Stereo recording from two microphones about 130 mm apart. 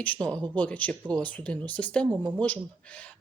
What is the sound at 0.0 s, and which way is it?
Speech, 10° left (ahead or behind).